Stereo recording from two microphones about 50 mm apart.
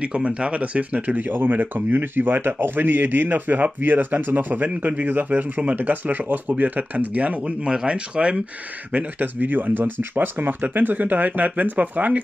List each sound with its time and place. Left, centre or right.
0.0 s speech: centre
8.9 s speech: right